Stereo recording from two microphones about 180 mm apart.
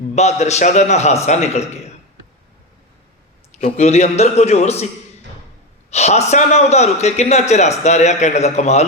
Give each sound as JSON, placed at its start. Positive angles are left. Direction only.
{"t": 0.2, "sound": "a man's voice", "side_deg": 40}
{"t": 3.5, "sound": "a man's voice", "side_deg": 40}
{"t": 5.9, "sound": "a man's voice", "side_deg": 35}